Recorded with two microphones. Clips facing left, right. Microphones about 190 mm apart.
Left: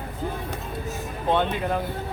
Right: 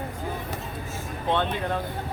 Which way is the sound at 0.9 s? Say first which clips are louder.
Left 2 dB; 10° left (ahead or behind).